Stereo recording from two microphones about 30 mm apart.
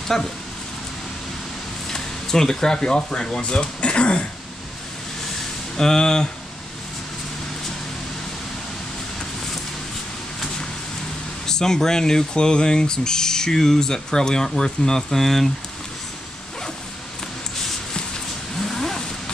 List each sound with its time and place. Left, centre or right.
0.1 s speech: centre
1.9 s speech: centre; by 4.3 s left
5.8 s speech: left
11.4 s speech: centre
18.6 s vehicle: centre